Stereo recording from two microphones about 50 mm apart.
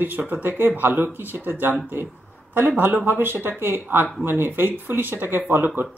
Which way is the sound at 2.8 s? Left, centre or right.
Right.